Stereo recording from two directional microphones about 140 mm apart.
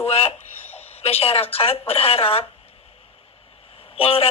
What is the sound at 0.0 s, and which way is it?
Speech, 45° left (ahead or behind).